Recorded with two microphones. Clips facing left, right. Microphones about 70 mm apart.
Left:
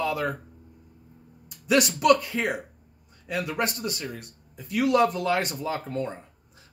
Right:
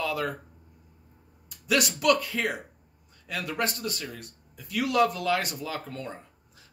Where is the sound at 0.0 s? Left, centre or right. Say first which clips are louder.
Left 2 dB; left.